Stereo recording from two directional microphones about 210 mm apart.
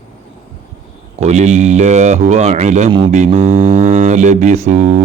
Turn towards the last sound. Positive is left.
turn(degrees=-35)  # may be behind; listen again after turning